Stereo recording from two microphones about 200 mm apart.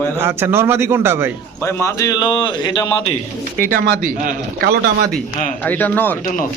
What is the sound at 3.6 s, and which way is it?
A man's voice, 40° right (ahead or behind).